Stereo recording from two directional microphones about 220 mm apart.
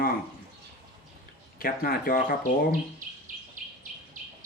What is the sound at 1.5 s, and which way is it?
Speech, 40° left (ahead or behind).